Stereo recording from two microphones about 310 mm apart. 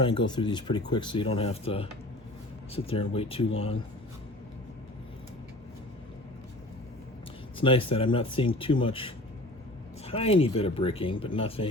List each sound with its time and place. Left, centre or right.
0.3 s speech: centre
7.6 s speech: centre